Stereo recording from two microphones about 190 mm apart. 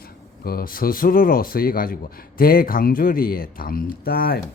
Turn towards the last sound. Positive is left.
turn(degrees=55)  # may be behind; listen again after turning